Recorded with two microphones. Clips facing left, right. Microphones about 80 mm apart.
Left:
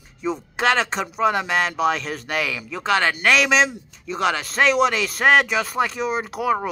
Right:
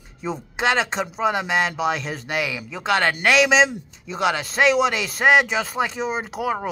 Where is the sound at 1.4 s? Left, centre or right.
Right.